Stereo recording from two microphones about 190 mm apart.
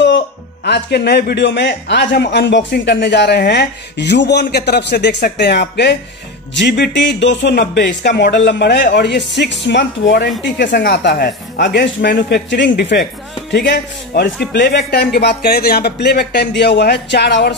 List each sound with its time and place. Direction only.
0.7 s a man's voice: 60° left (ahead or behind)